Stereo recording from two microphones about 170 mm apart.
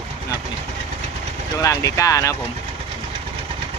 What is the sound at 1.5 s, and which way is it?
Speech, 20° left (ahead or behind).